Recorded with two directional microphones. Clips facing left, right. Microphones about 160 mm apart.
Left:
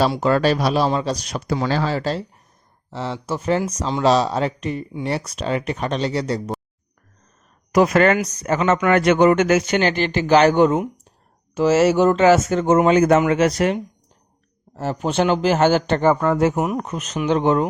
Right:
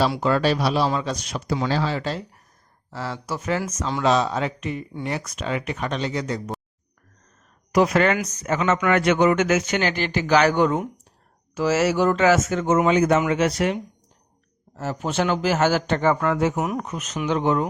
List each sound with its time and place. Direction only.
0.2 s speech: 45° left (ahead or behind)
0.9 s speech: 35° left (ahead or behind)
1.6 s speech: 60° left (ahead or behind)
1.9 s speech: 35° left (ahead or behind)
2.9 s speech: 25° left (ahead or behind)
7.7 s speech: 50° left (ahead or behind)
8.2 s speech: 35° left (ahead or behind)
14.8 s a man's voice: 30° left (ahead or behind)
16.6 s a man's voice: 25° left (ahead or behind)